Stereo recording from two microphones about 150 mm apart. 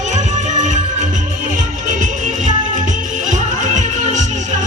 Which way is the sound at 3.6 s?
55° right (ahead or behind).